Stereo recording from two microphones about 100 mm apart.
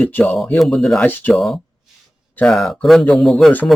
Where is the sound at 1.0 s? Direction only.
15° left (ahead or behind).